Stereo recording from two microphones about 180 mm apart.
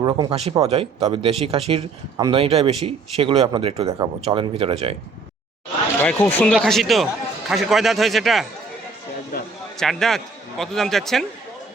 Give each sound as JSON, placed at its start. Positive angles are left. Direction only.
{"t": 0.0, "sound": "speech", "side_deg": -20}
{"t": 3.8, "sound": "speech", "side_deg": -20}
{"t": 6.0, "sound": "a man's voice", "side_deg": 10}
{"t": 9.7, "sound": "a man's voice", "side_deg": 0}